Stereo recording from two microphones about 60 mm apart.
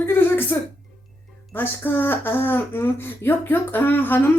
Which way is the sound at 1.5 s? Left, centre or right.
Left.